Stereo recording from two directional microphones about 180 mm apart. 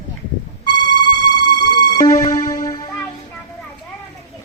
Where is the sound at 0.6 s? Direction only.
25° left (ahead or behind).